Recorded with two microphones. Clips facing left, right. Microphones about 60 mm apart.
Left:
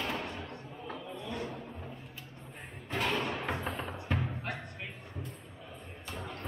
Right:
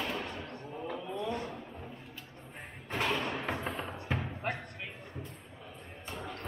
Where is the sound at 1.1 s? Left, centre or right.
Right.